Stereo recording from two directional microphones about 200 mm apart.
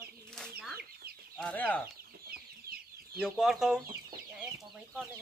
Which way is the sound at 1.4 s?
5° left (ahead or behind).